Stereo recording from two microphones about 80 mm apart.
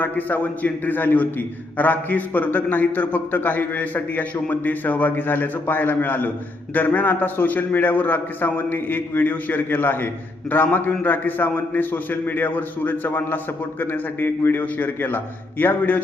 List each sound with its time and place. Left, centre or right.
0.0 s a man's voice: left